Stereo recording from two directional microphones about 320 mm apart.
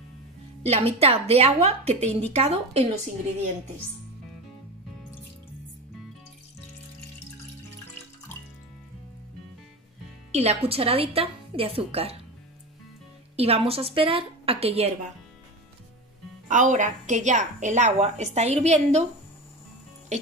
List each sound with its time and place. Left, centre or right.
0.7 s a woman's voice: centre
10.3 s a woman's voice: centre
13.4 s a woman's voice: centre
16.4 s a woman's voice: right
20.1 s a woman's voice: right